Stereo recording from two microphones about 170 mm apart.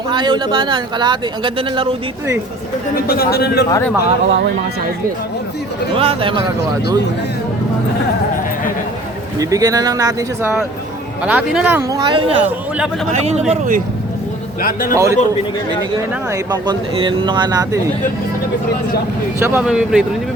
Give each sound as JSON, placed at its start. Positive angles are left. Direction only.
{"t": 0.1, "sound": "speech", "side_deg": -25}
{"t": 2.9, "sound": "speech", "side_deg": 60}
{"t": 3.3, "sound": "speech", "side_deg": 75}
{"t": 3.7, "sound": "speech", "side_deg": 15}
{"t": 5.9, "sound": "speech", "side_deg": -35}
{"t": 9.4, "sound": "speech", "side_deg": -20}
{"t": 11.2, "sound": "speech", "side_deg": -10}
{"t": 14.6, "sound": "speech", "side_deg": 55}
{"t": 14.9, "sound": "speech", "side_deg": -15}
{"t": 19.4, "sound": "speech", "side_deg": -15}